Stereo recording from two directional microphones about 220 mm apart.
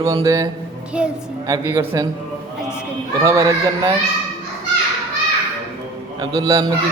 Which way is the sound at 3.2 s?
15° right (ahead or behind).